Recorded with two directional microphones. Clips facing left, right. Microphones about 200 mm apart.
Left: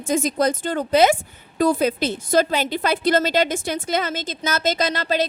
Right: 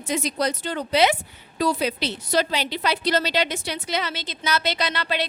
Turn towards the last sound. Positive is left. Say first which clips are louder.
# left 5 dB
turn(degrees=40)  # may be behind; listen again after turning